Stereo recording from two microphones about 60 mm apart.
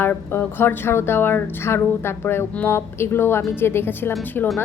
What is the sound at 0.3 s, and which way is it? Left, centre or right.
Speech, left.